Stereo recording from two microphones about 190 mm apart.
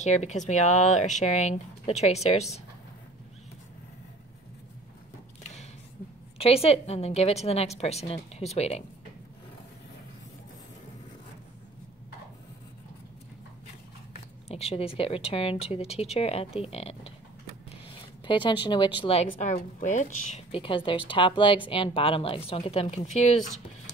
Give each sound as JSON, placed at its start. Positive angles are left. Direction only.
{"t": 0.0, "sound": "speech", "side_deg": 40}
{"t": 5.4, "sound": "a sound", "side_deg": 35}
{"t": 6.3, "sound": "speech", "side_deg": 30}
{"t": 14.5, "sound": "speech", "side_deg": 30}
{"t": 17.6, "sound": "a sound", "side_deg": 25}
{"t": 18.9, "sound": "speech", "side_deg": 30}
{"t": 19.5, "sound": "a woman's voice", "side_deg": 45}
{"t": 20.2, "sound": "speech", "side_deg": 30}